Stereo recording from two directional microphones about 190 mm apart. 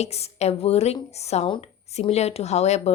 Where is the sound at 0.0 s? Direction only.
35° left (ahead or behind).